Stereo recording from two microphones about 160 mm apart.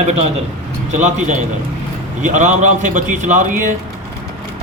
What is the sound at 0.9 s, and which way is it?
Speech, 50° right (ahead or behind).